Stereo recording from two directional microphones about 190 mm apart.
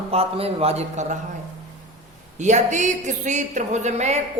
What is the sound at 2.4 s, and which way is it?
Speech, 40° right (ahead or behind).